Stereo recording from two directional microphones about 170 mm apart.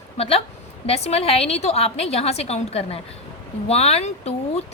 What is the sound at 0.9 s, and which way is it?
A woman's voice, 35° left (ahead or behind).